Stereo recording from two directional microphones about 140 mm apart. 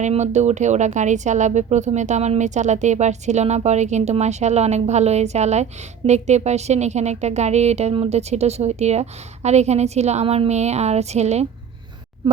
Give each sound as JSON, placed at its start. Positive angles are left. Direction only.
{"t": 0.0, "sound": "a woman's voice", "side_deg": -55}